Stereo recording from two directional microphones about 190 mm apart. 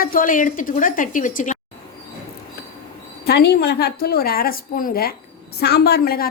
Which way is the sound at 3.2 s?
60° left (ahead or behind).